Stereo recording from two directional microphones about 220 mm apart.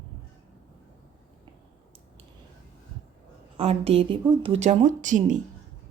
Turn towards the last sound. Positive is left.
turn(degrees=-35)  # may be behind; listen again after turning